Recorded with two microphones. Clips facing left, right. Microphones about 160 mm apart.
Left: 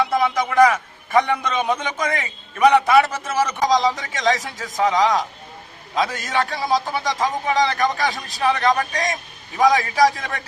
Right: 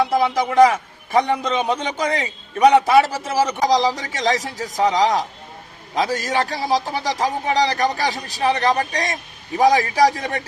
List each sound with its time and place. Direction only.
0.0 s a man's voice: 30° right (ahead or behind)